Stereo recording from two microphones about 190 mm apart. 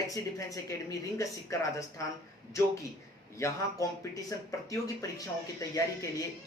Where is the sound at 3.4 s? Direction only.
15° left (ahead or behind).